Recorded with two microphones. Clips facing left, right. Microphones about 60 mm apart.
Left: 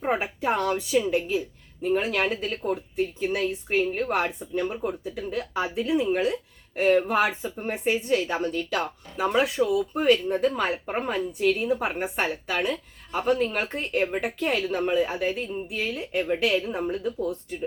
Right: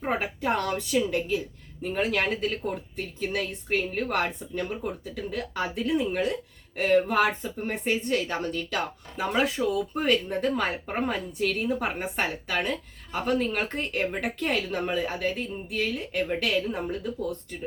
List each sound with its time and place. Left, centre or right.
0.0 s a woman's voice: centre